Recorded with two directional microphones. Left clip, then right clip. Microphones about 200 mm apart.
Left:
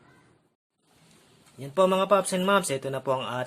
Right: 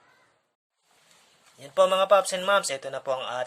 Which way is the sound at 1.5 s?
10° right (ahead or behind).